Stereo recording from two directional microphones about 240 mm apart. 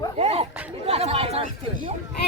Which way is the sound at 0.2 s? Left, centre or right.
Right.